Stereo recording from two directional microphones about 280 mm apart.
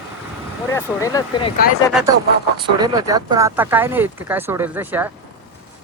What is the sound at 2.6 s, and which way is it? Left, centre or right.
Speech, centre.